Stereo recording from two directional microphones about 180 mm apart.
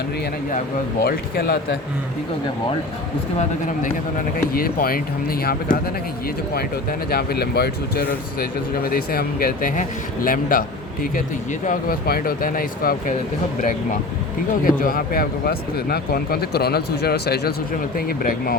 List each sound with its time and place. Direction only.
1.0 s speech: 60° left (ahead or behind)
4.5 s speech: 55° left (ahead or behind)
7.1 s speech: 60° left (ahead or behind)
11.6 s speech: 50° left (ahead or behind)
14.6 s speech: 55° left (ahead or behind)